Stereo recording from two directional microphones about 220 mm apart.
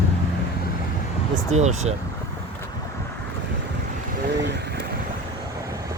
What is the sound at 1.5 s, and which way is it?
Speech, 30° right (ahead or behind).